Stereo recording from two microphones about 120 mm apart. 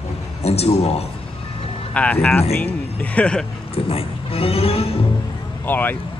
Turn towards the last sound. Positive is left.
turn(degrees=15)  # may be behind; listen again after turning